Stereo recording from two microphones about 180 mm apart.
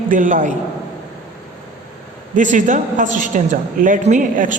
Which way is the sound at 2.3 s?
45° right (ahead or behind).